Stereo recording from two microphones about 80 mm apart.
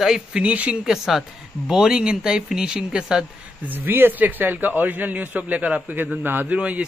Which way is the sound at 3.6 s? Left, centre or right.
Right.